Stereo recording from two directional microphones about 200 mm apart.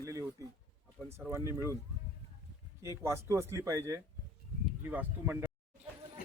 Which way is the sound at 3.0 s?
15° right (ahead or behind).